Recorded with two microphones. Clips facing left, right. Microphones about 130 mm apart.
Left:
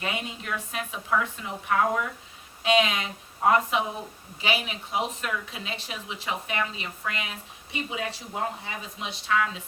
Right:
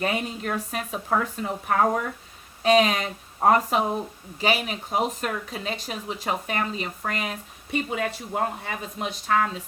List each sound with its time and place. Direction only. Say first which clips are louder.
0.0 s a woman's voice: right 6 dB; 40° right (ahead or behind)